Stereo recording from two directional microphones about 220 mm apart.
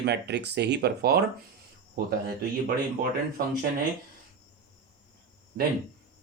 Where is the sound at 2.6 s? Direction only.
45° right (ahead or behind).